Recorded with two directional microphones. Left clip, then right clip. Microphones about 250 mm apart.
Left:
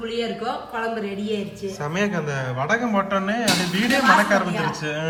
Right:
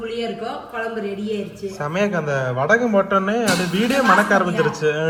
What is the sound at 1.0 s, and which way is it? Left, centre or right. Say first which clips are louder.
A man's voice: right 2 dB; centre.